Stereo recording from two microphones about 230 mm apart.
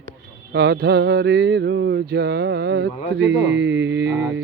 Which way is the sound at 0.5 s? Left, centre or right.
Right.